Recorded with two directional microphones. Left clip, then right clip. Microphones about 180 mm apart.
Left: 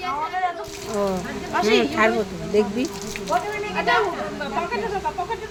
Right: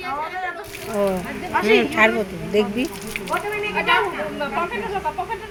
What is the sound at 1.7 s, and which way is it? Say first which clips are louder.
Speech: right 3 dB; 10° right (ahead or behind).